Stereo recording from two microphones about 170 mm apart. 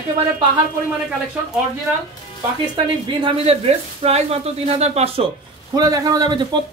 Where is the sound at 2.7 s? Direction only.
30° right (ahead or behind).